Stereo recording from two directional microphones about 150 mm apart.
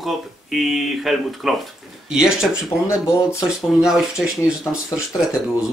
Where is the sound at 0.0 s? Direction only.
Centre (ahead or behind).